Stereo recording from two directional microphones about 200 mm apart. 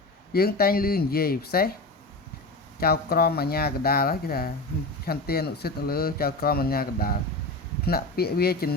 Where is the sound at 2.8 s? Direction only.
50° left (ahead or behind).